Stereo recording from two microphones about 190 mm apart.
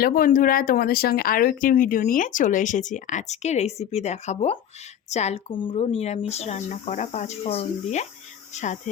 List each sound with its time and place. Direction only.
0.0 s speech: 50° left (ahead or behind)